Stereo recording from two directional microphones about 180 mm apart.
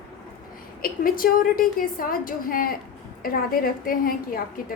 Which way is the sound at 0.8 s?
50° left (ahead or behind).